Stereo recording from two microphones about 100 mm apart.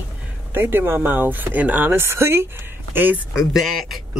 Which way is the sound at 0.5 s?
20° right (ahead or behind).